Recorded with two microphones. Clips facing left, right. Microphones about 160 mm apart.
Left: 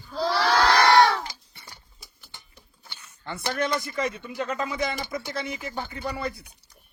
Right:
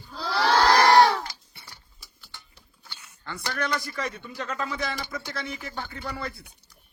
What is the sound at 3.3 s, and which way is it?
A man's voice, 20° left (ahead or behind).